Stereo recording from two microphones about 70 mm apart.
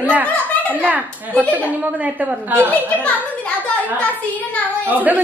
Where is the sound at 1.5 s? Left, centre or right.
Right.